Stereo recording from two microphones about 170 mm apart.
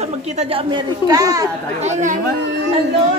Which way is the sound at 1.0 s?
20° right (ahead or behind).